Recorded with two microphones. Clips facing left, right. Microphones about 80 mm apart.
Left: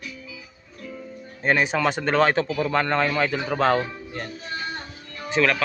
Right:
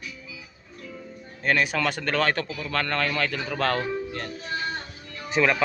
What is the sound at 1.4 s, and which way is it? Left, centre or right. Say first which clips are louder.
Speech: left 3 dB; left.